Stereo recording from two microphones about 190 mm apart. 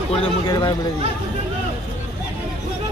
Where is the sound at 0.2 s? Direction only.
25° left (ahead or behind).